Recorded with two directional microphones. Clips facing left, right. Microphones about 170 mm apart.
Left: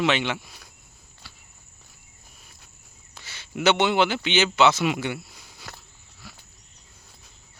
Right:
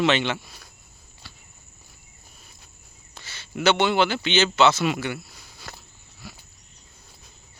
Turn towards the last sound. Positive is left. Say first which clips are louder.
# right 4 dB
turn(degrees=-5)  # may be behind; listen again after turning